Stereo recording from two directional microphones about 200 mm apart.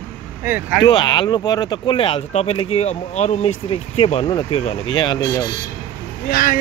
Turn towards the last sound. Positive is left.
turn(degrees=50)  # may be behind; listen again after turning